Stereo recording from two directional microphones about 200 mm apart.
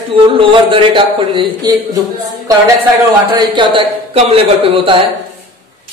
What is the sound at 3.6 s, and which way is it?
Speech, 25° right (ahead or behind).